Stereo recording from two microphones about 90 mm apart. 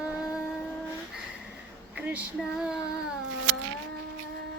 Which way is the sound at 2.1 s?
10° right (ahead or behind).